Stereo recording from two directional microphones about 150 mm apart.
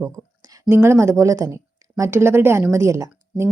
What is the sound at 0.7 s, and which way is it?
A woman's voice, 15° right (ahead or behind).